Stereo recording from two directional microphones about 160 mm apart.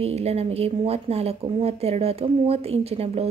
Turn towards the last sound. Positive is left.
turn(degrees=-40)  # may be behind; listen again after turning